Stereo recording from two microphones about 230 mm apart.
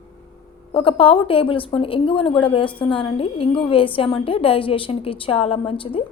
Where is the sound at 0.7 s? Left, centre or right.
Left.